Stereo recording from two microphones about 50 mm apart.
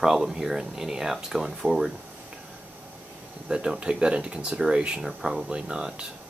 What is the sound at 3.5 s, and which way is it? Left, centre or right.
Speech, right.